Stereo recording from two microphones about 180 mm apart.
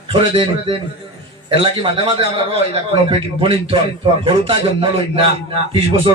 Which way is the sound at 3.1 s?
30° right (ahead or behind).